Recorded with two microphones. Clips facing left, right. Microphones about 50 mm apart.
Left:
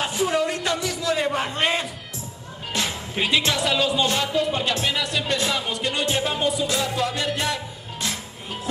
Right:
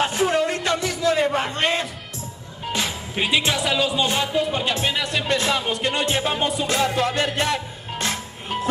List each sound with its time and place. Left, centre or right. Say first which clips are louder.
0.0 s a sound: right 2 dB; right
1.1 s a sound: even; centre
1.5 s music: right 1 dB; centre
2.9 s speech: left 1 dB; centre
4.0 s music: right 1 dB; centre
4.6 s speech: right 1 dB; right
5.3 s music: right 5 dB; right